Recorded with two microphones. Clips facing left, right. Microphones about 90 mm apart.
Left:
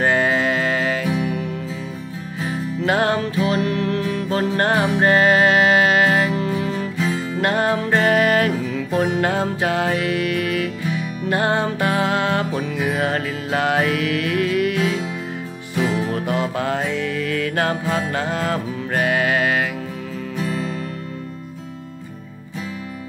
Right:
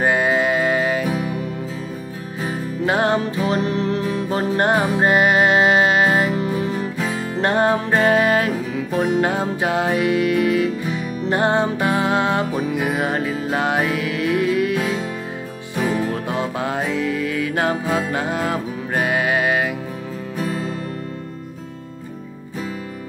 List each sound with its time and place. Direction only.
0.0 s music: 15° right (ahead or behind)
2.4 s music: 20° right (ahead or behind)
20.3 s music: 40° right (ahead or behind)